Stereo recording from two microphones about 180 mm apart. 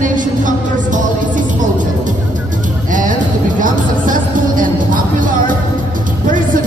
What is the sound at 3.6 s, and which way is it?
Music, 50° right (ahead or behind).